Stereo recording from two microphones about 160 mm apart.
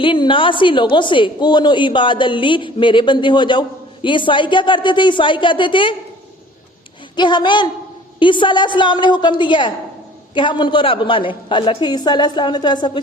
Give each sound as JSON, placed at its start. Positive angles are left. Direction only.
{"t": 0.0, "sound": "a woman's voice", "side_deg": 30}
{"t": 7.2, "sound": "a woman's voice", "side_deg": 30}